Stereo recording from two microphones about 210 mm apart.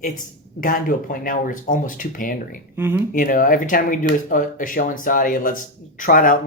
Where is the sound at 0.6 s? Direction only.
40° left (ahead or behind).